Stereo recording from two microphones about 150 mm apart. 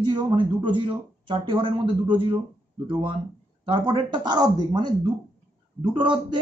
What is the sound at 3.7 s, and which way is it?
Speech, 30° right (ahead or behind).